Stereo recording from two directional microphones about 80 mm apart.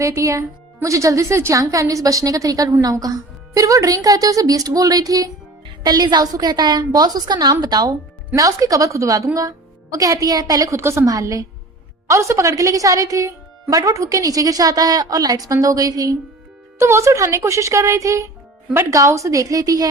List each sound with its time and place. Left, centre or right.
0.0 s a woman's voice: right
10.8 s a woman's voice: right
16.7 s a woman's voice: right